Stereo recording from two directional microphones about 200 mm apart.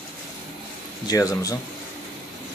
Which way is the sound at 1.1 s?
15° left (ahead or behind).